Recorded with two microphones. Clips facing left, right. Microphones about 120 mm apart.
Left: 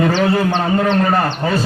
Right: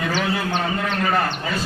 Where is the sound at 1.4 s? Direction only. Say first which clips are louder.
Left 8 dB; 45° left (ahead or behind).